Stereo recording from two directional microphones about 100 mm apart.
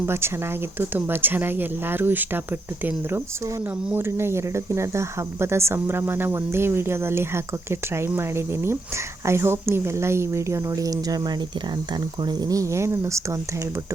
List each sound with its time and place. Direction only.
0.0 s speech: 25° right (ahead or behind)